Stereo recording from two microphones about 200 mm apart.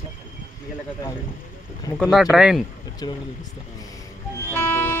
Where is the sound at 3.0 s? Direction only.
20° left (ahead or behind).